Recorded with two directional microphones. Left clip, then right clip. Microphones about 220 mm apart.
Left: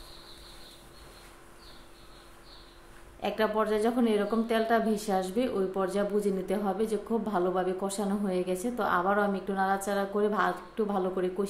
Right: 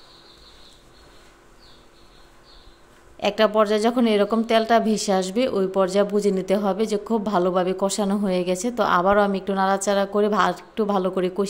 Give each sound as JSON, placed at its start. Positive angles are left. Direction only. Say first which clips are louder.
{"t": 3.2, "sound": "speech", "louder": "right 10 dB", "side_deg": -45}